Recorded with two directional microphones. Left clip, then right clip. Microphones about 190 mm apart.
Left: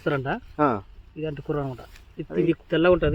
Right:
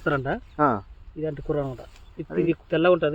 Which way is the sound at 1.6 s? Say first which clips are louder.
Even; 45° left (ahead or behind).